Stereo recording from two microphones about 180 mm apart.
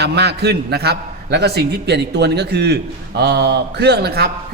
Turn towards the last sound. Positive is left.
turn(degrees=-60)  # may be behind; listen again after turning